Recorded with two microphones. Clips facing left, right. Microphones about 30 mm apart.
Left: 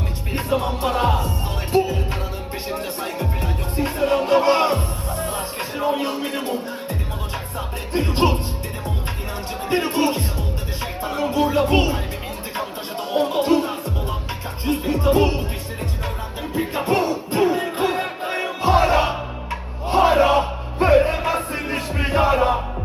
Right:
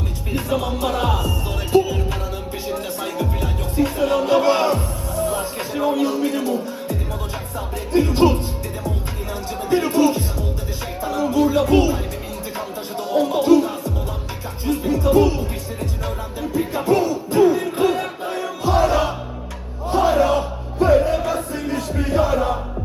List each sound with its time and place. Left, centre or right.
0.3 s music: left
7.9 s speech: left
9.6 s music: left
17.7 s music: left